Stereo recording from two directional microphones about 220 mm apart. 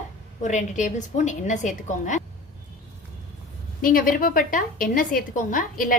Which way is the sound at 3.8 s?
40° left (ahead or behind).